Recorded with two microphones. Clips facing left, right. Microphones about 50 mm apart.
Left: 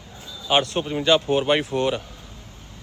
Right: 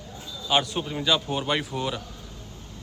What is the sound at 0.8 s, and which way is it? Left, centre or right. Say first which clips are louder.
Speech: left 6 dB; left.